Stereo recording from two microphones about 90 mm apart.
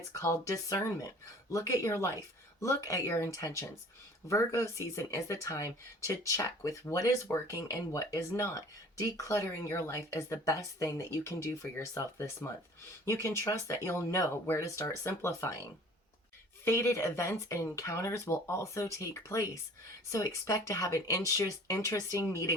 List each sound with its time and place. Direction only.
0.1 s speech: 35° left (ahead or behind)